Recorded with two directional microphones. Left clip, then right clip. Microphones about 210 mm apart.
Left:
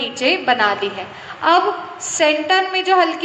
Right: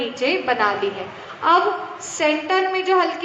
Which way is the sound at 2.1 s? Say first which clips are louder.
Left 4 dB; 50° left (ahead or behind).